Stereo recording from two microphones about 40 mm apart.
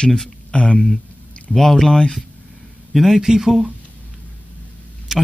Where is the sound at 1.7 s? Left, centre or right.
Centre.